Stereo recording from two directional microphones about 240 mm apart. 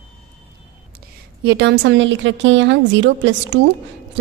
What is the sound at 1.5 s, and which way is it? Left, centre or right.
A woman's voice, right.